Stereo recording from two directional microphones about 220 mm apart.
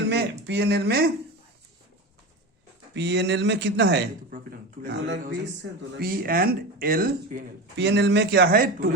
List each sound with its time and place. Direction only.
0.4 s speech: 50° right (ahead or behind)
2.9 s speech: 50° right (ahead or behind)